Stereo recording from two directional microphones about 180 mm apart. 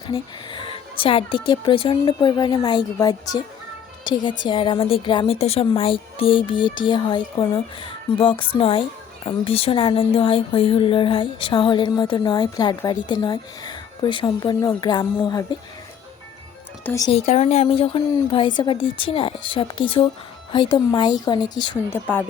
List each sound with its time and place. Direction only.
0.1 s speech: 30° left (ahead or behind)
16.8 s speech: 15° left (ahead or behind)
17.1 s speech: 35° left (ahead or behind)
21.8 s speech: 10° left (ahead or behind)